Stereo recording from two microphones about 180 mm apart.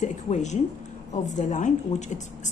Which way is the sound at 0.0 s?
40° left (ahead or behind).